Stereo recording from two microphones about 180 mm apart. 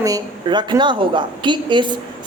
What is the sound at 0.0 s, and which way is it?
A woman's voice, 20° right (ahead or behind).